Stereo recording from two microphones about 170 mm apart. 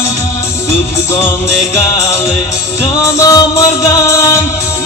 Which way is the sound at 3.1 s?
20° left (ahead or behind).